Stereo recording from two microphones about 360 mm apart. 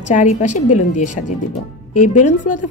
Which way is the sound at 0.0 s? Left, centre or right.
Centre.